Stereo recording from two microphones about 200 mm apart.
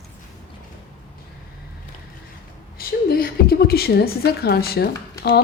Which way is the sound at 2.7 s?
50° left (ahead or behind).